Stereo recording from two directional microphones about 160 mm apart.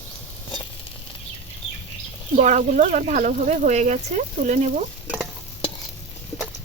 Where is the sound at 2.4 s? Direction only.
50° right (ahead or behind).